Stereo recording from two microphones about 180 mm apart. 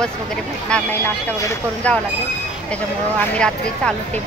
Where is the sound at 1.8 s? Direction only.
5° left (ahead or behind).